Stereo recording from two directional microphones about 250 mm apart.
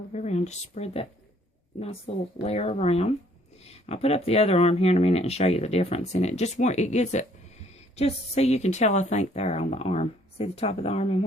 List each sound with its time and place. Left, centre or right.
0.1 s speech: left
2.1 s speech: left